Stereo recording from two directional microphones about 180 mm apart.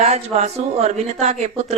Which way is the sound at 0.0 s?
35° right (ahead or behind).